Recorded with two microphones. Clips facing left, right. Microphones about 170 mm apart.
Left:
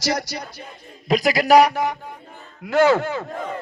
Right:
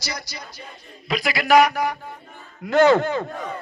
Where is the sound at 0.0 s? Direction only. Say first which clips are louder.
Left 10 dB; 85° left.